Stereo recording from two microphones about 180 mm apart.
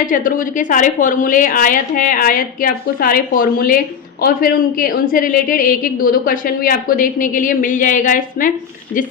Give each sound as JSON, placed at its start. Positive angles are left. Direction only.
{"t": 0.0, "sound": "a woman's voice", "side_deg": 50}